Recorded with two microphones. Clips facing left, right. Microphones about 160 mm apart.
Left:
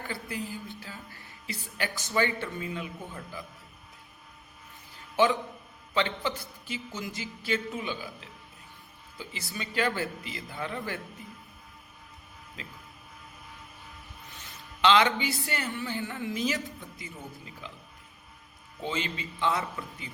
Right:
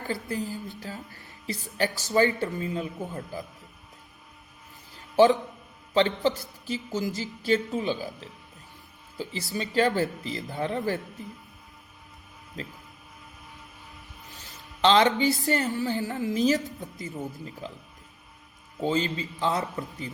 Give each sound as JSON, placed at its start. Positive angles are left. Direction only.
{"t": 0.1, "sound": "a woman's voice", "side_deg": -40}
{"t": 5.1, "sound": "a man's voice", "side_deg": -40}
{"t": 12.6, "sound": "a woman's voice", "side_deg": -40}
{"t": 14.8, "sound": "a woman's voice", "side_deg": -35}
{"t": 18.8, "sound": "a woman's voice", "side_deg": -40}